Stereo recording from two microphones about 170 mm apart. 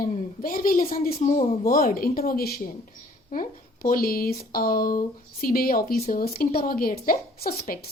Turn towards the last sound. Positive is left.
turn(degrees=60)  # may be behind; listen again after turning